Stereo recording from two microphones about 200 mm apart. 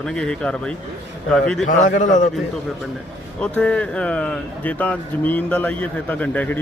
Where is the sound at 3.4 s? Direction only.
5° left (ahead or behind).